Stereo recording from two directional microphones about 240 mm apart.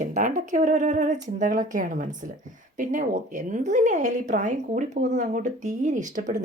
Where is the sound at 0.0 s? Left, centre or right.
Right.